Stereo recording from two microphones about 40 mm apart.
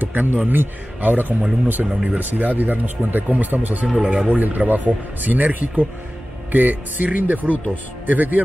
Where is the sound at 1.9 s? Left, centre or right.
Right.